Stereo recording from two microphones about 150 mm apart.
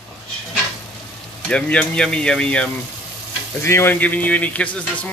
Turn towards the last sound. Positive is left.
turn(degrees=10)  # may be behind; listen again after turning